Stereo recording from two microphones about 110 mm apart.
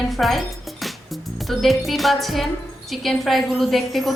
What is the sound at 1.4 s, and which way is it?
A woman's voice, centre (ahead or behind).